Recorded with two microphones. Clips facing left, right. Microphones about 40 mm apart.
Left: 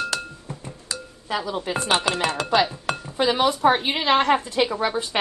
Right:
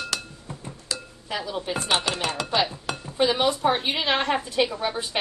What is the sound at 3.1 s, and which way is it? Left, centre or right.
Speech, left.